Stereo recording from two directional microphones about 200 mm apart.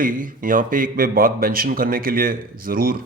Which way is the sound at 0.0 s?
45° right (ahead or behind).